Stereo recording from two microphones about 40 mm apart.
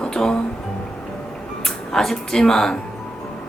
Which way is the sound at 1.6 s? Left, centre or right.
Centre.